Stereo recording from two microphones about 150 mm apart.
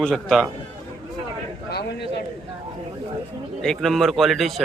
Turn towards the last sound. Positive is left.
turn(degrees=0)  # may be behind; listen again after turning